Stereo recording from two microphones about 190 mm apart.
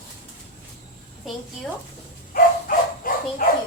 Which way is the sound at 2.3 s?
50° left (ahead or behind).